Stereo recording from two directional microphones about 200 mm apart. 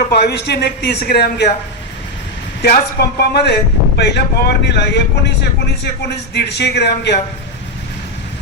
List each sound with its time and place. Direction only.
0.1 s speech: 55° left (ahead or behind)
2.6 s speech: 55° left (ahead or behind)